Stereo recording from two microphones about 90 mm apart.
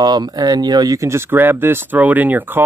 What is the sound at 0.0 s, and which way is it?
Speech, 50° right (ahead or behind).